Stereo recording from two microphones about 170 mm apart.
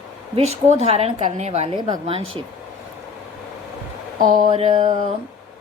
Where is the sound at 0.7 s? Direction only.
40° right (ahead or behind).